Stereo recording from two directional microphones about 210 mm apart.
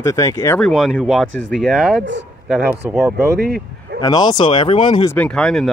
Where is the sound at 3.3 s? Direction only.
50° right (ahead or behind).